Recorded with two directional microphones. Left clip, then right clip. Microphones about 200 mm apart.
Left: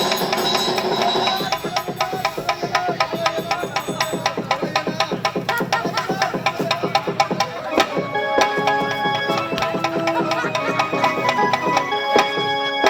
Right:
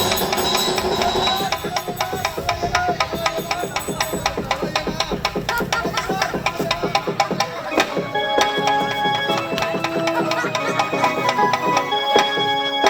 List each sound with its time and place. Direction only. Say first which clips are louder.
0.0 s music: even; centre (ahead or behind)